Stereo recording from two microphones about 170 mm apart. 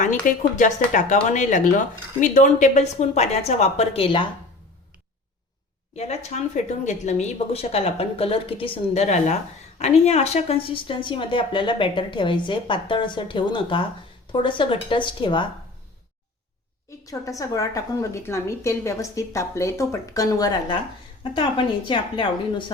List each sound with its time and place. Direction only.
0.0 s speech: 50° left (ahead or behind); by 4.3 s 30° left (ahead or behind)
6.0 s a woman's voice: 40° left (ahead or behind)
17.1 s a woman's voice: 20° left (ahead or behind)